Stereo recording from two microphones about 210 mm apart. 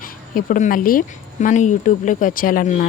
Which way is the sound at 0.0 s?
40° left (ahead or behind).